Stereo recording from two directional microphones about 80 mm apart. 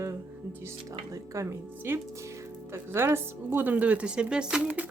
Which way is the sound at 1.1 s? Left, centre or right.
Right.